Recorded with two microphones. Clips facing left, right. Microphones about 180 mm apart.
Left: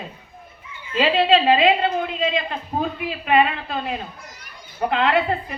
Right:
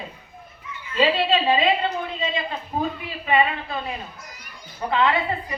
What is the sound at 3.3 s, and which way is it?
A woman's voice, 65° left (ahead or behind).